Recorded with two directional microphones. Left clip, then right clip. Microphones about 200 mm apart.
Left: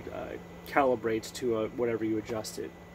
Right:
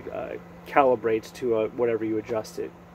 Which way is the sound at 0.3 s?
Centre (ahead or behind).